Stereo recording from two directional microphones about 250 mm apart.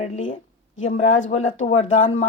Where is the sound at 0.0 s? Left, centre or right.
Left.